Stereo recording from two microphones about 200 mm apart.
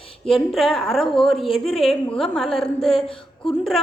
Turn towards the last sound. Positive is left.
turn(degrees=0)  # may be behind; listen again after turning